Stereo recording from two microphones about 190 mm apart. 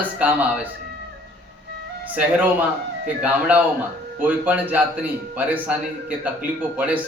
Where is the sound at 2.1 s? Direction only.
10° right (ahead or behind).